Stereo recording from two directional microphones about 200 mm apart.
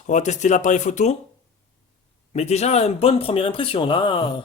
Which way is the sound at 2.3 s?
35° left (ahead or behind).